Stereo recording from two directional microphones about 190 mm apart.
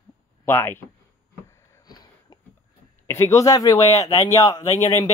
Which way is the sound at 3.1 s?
15° left (ahead or behind).